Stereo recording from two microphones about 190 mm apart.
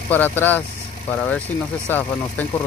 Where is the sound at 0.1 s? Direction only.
10° left (ahead or behind).